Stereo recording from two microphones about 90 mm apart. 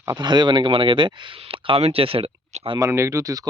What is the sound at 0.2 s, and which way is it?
Speech, 60° right (ahead or behind).